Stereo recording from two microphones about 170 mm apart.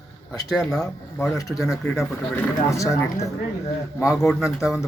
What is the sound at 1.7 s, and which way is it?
Speech, 15° left (ahead or behind).